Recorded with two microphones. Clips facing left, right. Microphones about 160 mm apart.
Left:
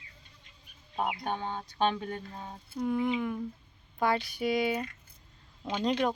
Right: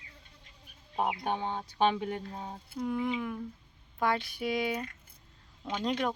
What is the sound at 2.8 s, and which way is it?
Speech, centre (ahead or behind).